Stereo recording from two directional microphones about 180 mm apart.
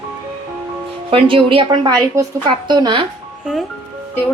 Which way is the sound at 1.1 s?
30° right (ahead or behind).